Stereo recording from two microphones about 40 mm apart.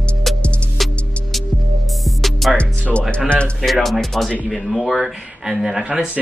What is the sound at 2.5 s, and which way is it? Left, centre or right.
Music, left.